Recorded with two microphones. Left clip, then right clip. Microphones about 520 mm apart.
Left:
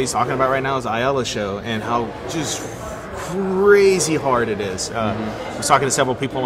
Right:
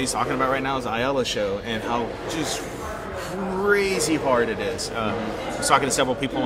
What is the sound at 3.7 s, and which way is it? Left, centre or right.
Speech, left.